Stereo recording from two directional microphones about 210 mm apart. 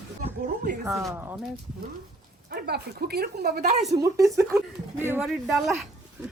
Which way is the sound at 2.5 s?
45° right (ahead or behind).